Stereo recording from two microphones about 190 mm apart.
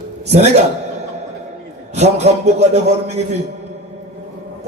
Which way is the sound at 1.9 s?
35° right (ahead or behind).